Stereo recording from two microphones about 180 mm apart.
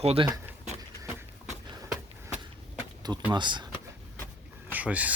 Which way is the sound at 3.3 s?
25° right (ahead or behind).